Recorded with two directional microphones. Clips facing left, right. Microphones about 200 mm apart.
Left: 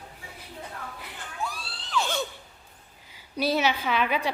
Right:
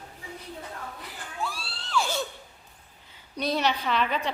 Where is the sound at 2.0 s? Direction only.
5° right (ahead or behind).